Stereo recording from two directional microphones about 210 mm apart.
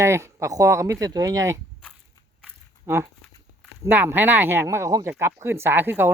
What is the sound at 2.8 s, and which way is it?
Speech, 10° right (ahead or behind).